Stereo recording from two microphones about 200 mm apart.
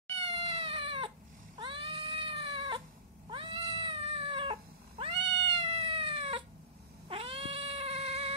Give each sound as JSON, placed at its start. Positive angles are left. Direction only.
{"t": 0.2, "sound": "cat", "side_deg": -25}